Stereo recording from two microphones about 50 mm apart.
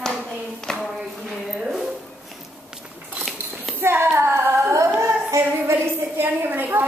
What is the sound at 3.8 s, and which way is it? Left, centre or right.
Child singing, right.